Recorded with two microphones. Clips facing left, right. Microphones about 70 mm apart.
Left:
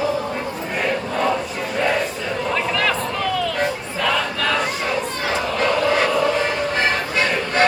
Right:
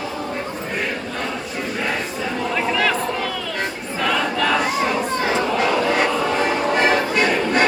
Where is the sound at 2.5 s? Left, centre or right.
Centre.